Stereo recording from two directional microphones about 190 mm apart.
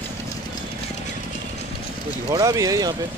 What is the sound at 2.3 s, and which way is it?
Speech, 20° right (ahead or behind).